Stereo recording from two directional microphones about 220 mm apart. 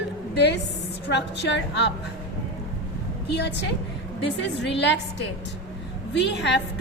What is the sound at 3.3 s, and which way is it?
A woman's voice, 50° left (ahead or behind).